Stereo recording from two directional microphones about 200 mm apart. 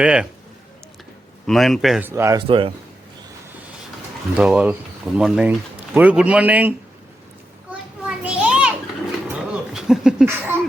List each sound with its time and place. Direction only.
0.0 s speech: 5° right (ahead or behind)
1.5 s speech: centre (ahead or behind)
2.5 s speech: 25° right (ahead or behind)
4.4 s speech: 5° right (ahead or behind)
7.7 s children playing: 5° right (ahead or behind)
9.3 s a sound: 5° right (ahead or behind)